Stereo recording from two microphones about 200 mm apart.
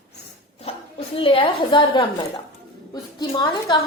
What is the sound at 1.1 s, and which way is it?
A woman's voice, 25° left (ahead or behind).